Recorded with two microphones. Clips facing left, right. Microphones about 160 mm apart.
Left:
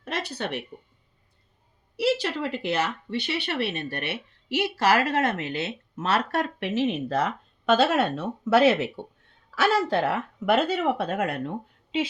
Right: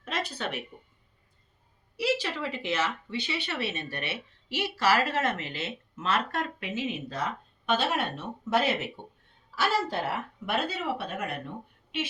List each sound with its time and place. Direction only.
2.0 s a woman's voice: 65° left (ahead or behind)